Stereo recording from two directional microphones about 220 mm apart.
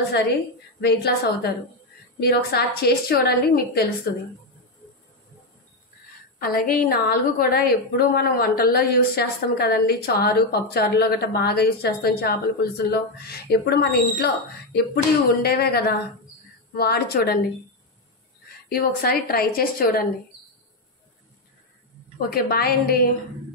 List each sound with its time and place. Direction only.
0.7 s a woman's voice: 50° left (ahead or behind)
6.4 s a woman's voice: 40° left (ahead or behind)
18.7 s a woman's voice: 45° left (ahead or behind)
22.3 s a woman's voice: 45° left (ahead or behind)